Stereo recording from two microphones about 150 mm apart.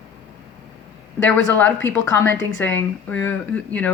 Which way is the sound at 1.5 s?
10° left (ahead or behind).